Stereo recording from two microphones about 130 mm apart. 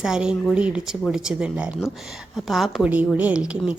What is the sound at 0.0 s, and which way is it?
A woman's voice, 5° right (ahead or behind).